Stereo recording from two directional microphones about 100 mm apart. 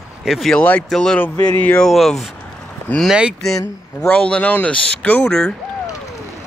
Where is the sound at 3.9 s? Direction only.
15° left (ahead or behind).